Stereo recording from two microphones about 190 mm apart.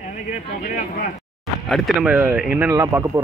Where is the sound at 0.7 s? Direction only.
45° left (ahead or behind).